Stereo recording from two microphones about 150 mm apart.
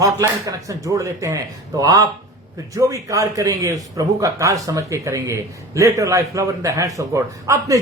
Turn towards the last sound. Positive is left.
turn(degrees=-20)  # may be behind; listen again after turning